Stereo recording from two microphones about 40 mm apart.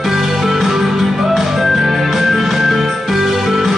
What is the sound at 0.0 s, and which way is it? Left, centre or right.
Music, centre.